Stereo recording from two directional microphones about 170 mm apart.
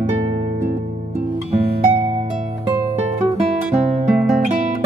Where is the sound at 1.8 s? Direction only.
35° right (ahead or behind).